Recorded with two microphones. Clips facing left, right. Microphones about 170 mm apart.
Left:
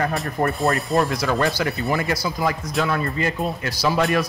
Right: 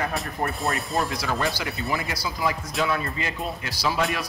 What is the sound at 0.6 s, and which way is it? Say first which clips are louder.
Speech: left 6 dB; centre (ahead or behind).